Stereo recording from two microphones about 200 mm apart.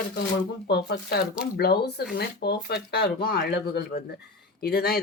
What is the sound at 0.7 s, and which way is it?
Speech, 55° left (ahead or behind).